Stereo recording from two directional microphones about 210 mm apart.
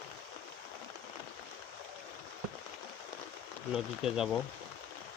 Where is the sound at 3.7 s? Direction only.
5° right (ahead or behind).